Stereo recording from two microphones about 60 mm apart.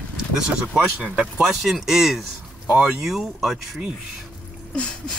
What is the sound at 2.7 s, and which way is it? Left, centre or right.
Speech, centre.